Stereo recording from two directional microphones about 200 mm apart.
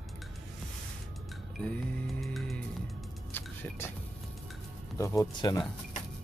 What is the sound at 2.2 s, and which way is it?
Speech, centre (ahead or behind).